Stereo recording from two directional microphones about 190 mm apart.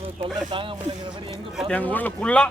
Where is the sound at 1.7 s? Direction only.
10° left (ahead or behind).